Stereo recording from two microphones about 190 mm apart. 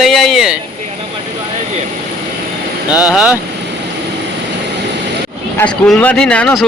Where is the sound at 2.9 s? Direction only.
20° left (ahead or behind).